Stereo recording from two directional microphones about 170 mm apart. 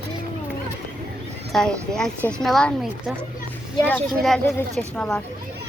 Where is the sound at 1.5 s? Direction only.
5° left (ahead or behind).